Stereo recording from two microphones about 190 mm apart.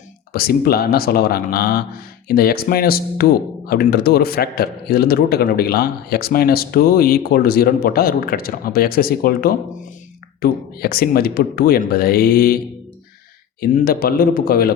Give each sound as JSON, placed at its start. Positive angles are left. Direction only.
{"t": 0.3, "sound": "a man's voice", "side_deg": 55}
{"t": 13.6, "sound": "a man's voice", "side_deg": 50}